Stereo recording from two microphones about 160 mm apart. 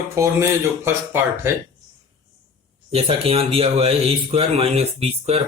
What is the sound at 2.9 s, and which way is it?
Speech, 35° right (ahead or behind).